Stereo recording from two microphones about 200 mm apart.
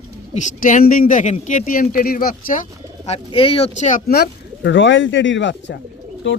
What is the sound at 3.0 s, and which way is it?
Speech, 30° left (ahead or behind).